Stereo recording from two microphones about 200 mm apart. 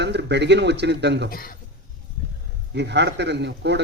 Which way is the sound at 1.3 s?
45° left (ahead or behind).